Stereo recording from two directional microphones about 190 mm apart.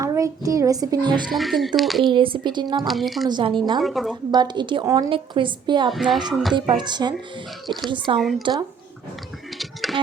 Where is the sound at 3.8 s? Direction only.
Centre (ahead or behind).